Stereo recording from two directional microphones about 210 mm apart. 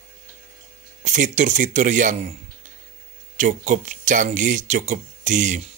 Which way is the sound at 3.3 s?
35° right (ahead or behind).